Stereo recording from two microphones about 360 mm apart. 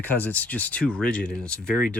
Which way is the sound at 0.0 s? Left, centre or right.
Centre.